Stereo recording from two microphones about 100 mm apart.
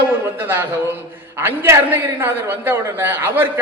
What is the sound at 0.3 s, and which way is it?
A man's voice, 20° right (ahead or behind).